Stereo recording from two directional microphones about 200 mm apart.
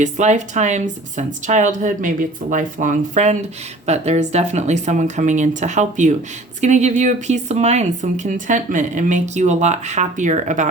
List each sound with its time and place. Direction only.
0.0 s speech: 35° right (ahead or behind)